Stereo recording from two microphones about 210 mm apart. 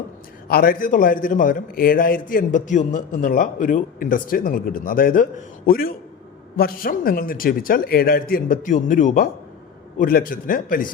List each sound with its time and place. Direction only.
0.4 s a man's voice: 45° left (ahead or behind)